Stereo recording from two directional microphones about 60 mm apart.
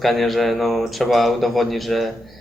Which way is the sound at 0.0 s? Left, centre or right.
Centre.